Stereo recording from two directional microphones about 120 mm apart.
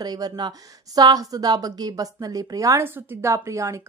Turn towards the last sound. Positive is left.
turn(degrees=-25)  # may be behind; listen again after turning